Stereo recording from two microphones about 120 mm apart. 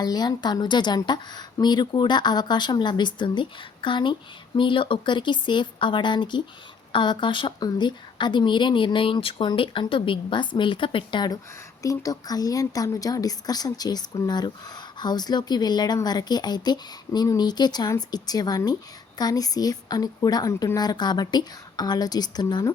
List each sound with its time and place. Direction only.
0.0 s a woman's voice: 35° left (ahead or behind)
11.8 s a woman's voice: 30° left (ahead or behind)